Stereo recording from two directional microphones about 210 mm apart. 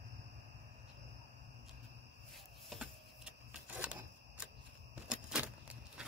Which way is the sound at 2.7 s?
5° right (ahead or behind).